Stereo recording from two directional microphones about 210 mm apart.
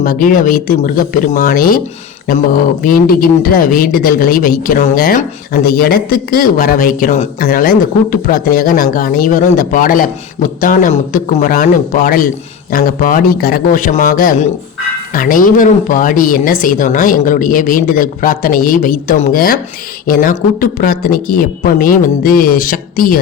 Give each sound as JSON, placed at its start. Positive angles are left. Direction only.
{"t": 0.0, "sound": "speech", "side_deg": 40}
{"t": 2.8, "sound": "speech", "side_deg": 45}